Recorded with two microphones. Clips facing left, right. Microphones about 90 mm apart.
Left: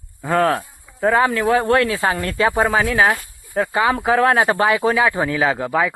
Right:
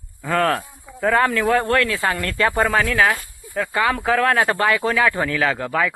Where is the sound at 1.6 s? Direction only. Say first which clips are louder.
Left 3 dB; 20° left (ahead or behind).